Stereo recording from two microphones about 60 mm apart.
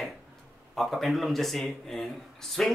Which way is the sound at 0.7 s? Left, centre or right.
Centre.